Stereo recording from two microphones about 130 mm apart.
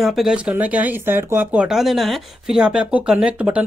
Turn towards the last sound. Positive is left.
turn(degrees=-10)  # may be behind; listen again after turning